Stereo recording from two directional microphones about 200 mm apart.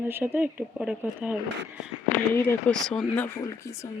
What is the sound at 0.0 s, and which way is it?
Speech, 10° right (ahead or behind).